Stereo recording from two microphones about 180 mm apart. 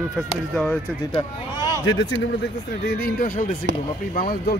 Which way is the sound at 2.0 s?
90° left.